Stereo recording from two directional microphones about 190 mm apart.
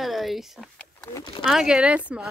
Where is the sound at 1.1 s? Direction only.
20° left (ahead or behind).